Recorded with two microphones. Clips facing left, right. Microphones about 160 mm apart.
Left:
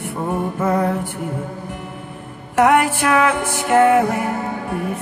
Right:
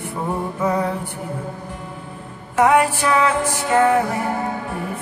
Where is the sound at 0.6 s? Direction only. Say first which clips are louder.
Left 2 dB; 50° left (ahead or behind).